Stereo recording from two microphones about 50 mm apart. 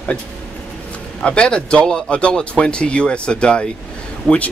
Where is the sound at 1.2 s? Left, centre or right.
Centre.